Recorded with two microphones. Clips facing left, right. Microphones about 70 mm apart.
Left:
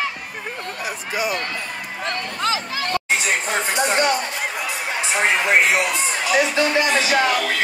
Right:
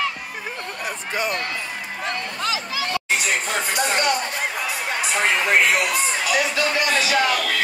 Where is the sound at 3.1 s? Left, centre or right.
Left.